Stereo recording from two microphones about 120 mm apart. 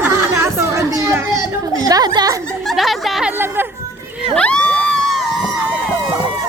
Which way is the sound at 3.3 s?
20° right (ahead or behind).